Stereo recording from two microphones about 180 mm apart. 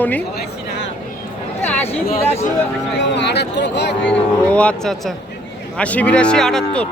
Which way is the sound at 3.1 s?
70° left (ahead or behind).